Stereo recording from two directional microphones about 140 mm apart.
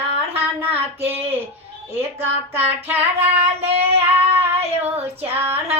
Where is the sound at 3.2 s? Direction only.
50° right (ahead or behind).